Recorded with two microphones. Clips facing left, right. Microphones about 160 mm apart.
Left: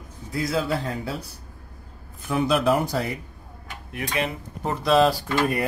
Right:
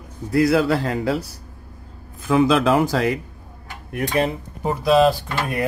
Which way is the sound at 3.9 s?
40° right (ahead or behind).